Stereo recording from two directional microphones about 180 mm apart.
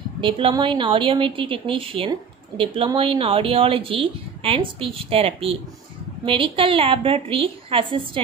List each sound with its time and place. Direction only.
0.2 s a woman's voice: 30° right (ahead or behind)